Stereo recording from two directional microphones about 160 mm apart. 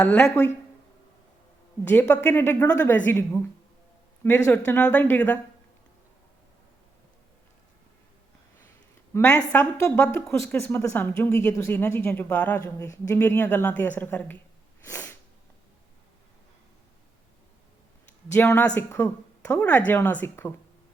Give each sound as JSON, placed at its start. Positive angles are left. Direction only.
{"t": 0.0, "sound": "a woman's voice", "side_deg": 15}
{"t": 1.8, "sound": "a woman's voice", "side_deg": 10}
{"t": 9.1, "sound": "a woman's voice", "side_deg": 20}
{"t": 14.8, "sound": "sneeze", "side_deg": 15}
{"t": 18.3, "sound": "a woman's voice", "side_deg": 10}